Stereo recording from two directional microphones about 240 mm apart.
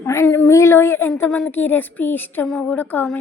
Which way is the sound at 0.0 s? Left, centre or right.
Centre.